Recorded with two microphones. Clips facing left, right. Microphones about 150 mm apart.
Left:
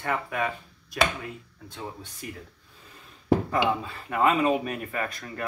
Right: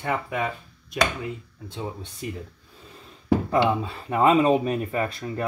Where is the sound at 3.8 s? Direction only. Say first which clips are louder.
Right 3 dB; 30° right (ahead or behind).